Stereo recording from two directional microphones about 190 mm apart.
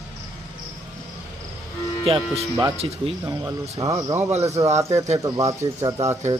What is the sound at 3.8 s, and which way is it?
Speech, 15° right (ahead or behind).